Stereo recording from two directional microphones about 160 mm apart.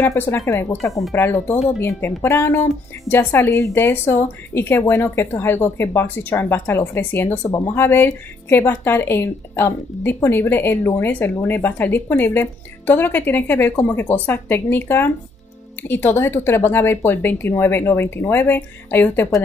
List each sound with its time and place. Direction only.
0.0 s speech: 10° left (ahead or behind)